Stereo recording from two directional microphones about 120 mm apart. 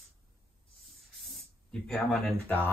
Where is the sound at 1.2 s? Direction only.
5° left (ahead or behind).